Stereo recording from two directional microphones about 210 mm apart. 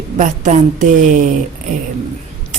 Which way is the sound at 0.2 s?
35° right (ahead or behind).